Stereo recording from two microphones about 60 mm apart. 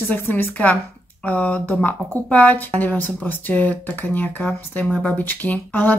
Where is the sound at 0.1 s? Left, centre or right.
Left.